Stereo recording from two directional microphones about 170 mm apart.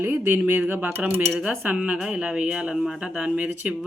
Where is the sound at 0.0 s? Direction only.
10° right (ahead or behind).